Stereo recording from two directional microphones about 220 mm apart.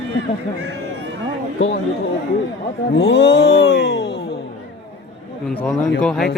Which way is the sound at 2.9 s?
55° left (ahead or behind).